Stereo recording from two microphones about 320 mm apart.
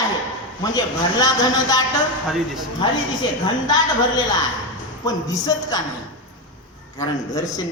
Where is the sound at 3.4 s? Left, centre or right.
Centre.